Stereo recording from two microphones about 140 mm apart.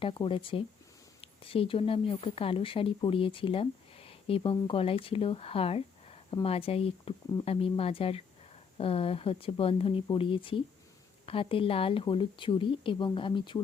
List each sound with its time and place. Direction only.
0.0 s speech: 35° left (ahead or behind)